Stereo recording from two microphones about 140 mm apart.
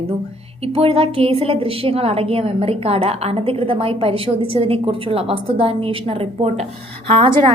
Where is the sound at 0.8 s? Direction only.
40° right (ahead or behind).